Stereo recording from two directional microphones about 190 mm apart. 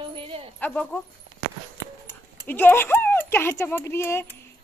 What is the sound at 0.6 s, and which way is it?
Speech, 10° left (ahead or behind).